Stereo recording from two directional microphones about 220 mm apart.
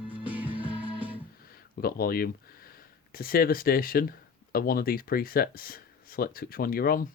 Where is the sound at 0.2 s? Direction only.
5° right (ahead or behind).